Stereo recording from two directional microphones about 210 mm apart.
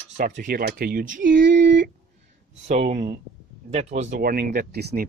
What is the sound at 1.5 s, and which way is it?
Speech, 55° right (ahead or behind).